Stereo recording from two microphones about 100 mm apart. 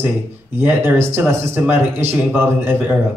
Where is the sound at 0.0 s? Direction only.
20° right (ahead or behind).